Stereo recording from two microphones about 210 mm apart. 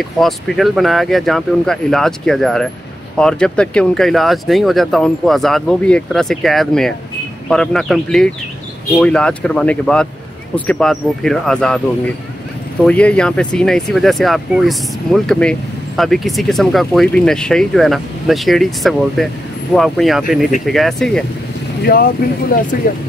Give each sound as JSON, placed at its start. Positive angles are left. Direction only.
{"t": 0.0, "sound": "speech", "side_deg": 0}
{"t": 12.8, "sound": "speech", "side_deg": 5}
{"t": 21.8, "sound": "speech", "side_deg": 45}